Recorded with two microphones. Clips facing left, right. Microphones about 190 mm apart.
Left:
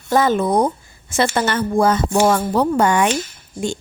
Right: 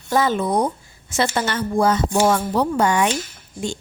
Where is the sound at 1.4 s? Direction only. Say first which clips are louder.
Left 3 dB; 55° left (ahead or behind).